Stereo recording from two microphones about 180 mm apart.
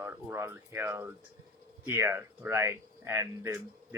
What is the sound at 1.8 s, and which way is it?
Speech, 15° right (ahead or behind).